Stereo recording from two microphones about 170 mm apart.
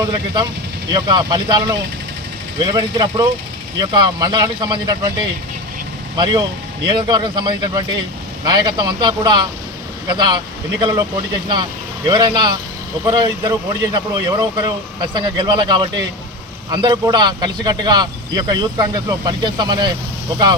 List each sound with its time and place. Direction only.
0.9 s a man's voice: 25° right (ahead or behind)
6.1 s a man's voice: 25° right (ahead or behind)
12.0 s a man's voice: 25° right (ahead or behind)